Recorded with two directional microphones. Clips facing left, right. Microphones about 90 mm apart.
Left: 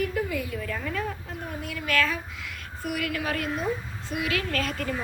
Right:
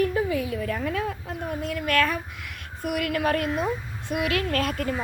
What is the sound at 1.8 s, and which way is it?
A child's voice, 55° right (ahead or behind).